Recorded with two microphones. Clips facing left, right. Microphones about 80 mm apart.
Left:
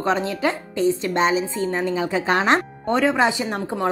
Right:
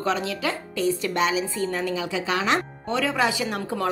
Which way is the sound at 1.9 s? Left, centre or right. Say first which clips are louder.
Left 5 dB; left.